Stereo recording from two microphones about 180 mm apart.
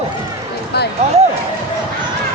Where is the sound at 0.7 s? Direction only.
65° left (ahead or behind).